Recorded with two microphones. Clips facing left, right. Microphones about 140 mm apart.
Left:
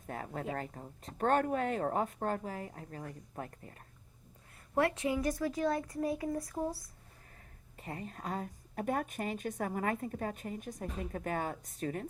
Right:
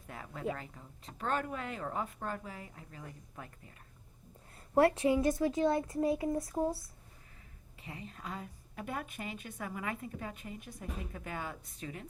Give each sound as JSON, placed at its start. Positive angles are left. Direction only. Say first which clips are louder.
{"t": 0.1, "sound": "a sound", "louder": "left 6 dB", "side_deg": 45}
{"t": 0.5, "sound": "a woman's voice", "louder": "left 6 dB", "side_deg": 45}
{"t": 4.7, "sound": "a child's voice", "louder": "right 4 dB", "side_deg": -30}
{"t": 7.8, "sound": "a woman's voice", "louder": "left 4 dB", "side_deg": 45}